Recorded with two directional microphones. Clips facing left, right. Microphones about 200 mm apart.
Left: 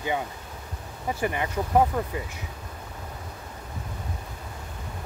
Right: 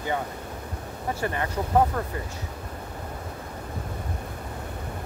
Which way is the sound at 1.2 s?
15° left (ahead or behind).